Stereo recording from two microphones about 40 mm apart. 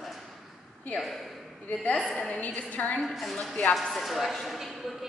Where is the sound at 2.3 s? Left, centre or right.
Left.